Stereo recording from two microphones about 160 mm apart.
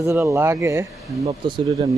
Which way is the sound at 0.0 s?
20° right (ahead or behind).